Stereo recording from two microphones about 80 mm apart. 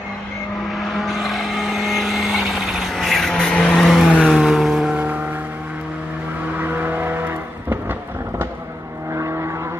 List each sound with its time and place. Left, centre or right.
0.7 s vehicle: centre
6.6 s vehicle: right
9.1 s vehicle: right